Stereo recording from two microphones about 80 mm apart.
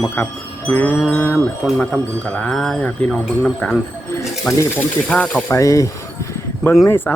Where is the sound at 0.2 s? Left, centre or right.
Left.